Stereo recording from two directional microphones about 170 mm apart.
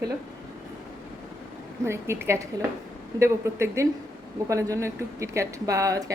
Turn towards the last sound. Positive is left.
turn(degrees=-20)  # may be behind; listen again after turning